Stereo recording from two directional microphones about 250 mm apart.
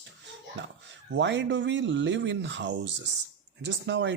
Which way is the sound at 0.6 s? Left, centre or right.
Right.